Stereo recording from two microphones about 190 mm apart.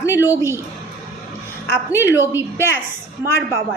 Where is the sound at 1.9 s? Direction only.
10° right (ahead or behind).